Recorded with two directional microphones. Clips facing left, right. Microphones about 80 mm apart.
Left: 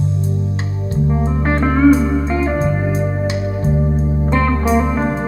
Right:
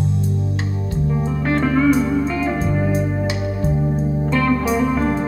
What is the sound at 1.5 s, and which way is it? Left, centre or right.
Music, left.